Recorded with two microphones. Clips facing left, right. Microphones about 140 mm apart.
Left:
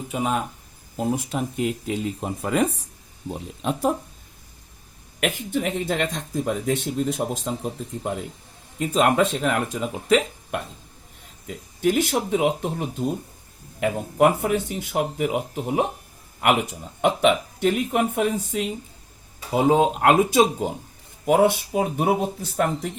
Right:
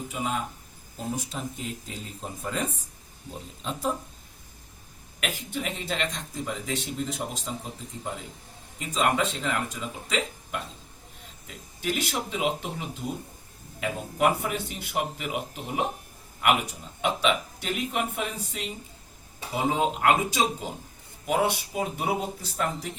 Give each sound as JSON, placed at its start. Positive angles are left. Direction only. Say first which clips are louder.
{"t": 0.1, "sound": "speech", "louder": "left 7 dB", "side_deg": 55}
{"t": 5.2, "sound": "speech", "louder": "left 8 dB", "side_deg": 50}